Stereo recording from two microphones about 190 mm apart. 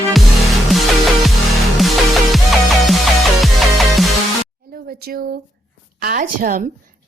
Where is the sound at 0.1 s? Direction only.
Centre (ahead or behind).